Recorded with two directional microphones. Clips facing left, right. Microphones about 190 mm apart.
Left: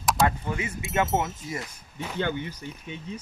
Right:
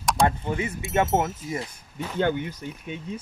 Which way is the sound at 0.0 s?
Centre (ahead or behind).